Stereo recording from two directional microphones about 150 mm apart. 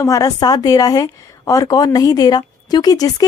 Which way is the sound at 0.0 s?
20° left (ahead or behind).